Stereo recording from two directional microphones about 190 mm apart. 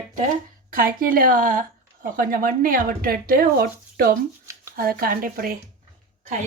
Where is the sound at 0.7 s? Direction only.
50° right (ahead or behind).